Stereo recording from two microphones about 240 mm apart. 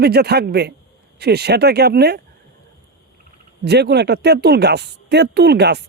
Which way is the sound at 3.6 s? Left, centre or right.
Right.